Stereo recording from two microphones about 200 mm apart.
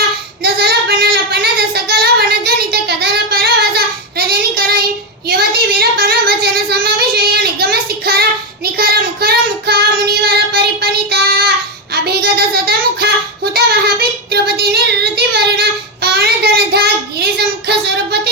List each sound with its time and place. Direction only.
0.4 s child singing: 55° right (ahead or behind)
5.3 s a sound: 50° right (ahead or behind)
7.6 s child singing: 50° right (ahead or behind)